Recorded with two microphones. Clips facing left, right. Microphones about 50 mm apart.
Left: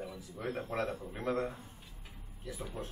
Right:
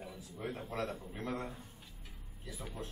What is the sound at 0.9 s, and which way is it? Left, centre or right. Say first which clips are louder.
A man's voice: left 5 dB; centre.